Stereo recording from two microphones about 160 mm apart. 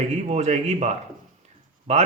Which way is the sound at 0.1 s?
45° right (ahead or behind).